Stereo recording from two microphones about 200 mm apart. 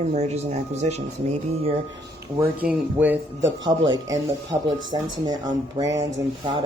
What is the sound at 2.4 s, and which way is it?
A woman's voice, 10° right (ahead or behind).